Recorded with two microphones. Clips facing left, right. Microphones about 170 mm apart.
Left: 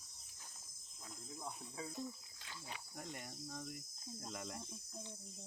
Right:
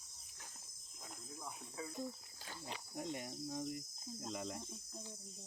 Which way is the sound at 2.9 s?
10° right (ahead or behind).